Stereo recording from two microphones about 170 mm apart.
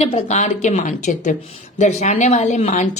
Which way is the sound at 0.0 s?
40° left (ahead or behind).